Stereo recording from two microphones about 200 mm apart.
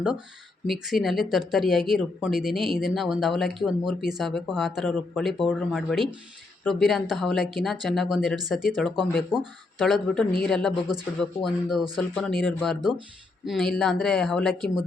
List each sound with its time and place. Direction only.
0.7 s speech: centre (ahead or behind)